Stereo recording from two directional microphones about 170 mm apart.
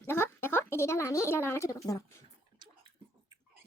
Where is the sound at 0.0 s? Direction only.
15° left (ahead or behind).